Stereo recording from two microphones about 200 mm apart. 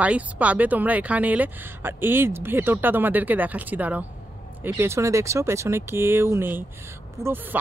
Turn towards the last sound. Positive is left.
turn(degrees=-15)  # may be behind; listen again after turning